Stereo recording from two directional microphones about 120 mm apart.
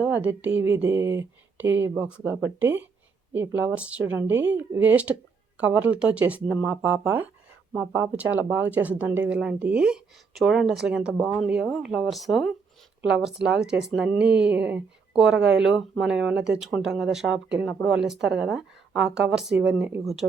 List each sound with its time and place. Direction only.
0.0 s a woman's voice: 10° right (ahead or behind)